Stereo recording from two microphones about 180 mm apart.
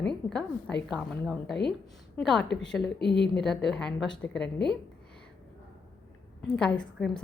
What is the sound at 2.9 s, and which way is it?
Speech, 70° left (ahead or behind).